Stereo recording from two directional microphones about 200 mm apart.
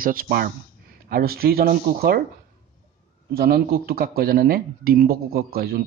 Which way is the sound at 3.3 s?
50° right (ahead or behind).